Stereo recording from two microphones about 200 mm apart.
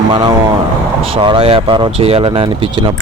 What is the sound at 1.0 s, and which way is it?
Speech, 25° right (ahead or behind).